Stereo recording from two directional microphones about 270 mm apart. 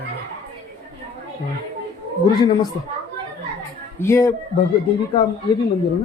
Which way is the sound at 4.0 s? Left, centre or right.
Centre.